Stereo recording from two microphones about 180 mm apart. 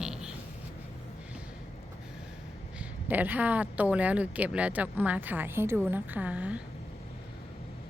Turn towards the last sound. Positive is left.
turn(degrees=-5)  # may be behind; listen again after turning